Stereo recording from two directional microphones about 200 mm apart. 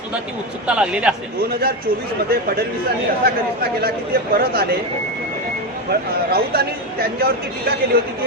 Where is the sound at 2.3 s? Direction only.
50° right (ahead or behind).